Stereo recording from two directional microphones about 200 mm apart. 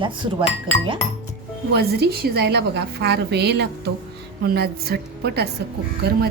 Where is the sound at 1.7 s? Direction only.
50° right (ahead or behind).